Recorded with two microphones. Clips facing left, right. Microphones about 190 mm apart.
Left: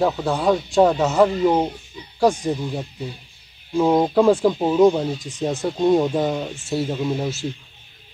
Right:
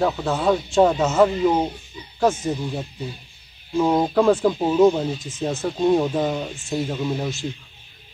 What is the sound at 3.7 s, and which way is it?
Speech, 10° left (ahead or behind).